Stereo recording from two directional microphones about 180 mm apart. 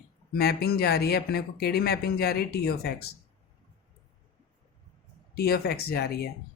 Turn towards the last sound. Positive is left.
turn(degrees=60)  # may be behind; listen again after turning